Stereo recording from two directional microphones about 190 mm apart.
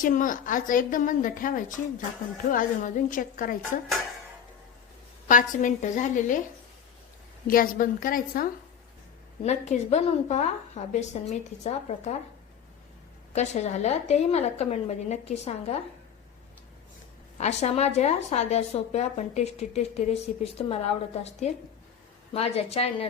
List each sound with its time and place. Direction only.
0.0 s a woman's voice: 45° left (ahead or behind)
5.3 s a woman's voice: 45° left (ahead or behind)
7.4 s a woman's voice: 50° left (ahead or behind)
9.4 s a woman's voice: 35° left (ahead or behind)
13.3 s a woman's voice: 40° left (ahead or behind)
17.3 s a woman's voice: 35° left (ahead or behind)